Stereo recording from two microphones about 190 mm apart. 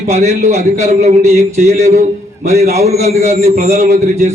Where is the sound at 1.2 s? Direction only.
15° right (ahead or behind).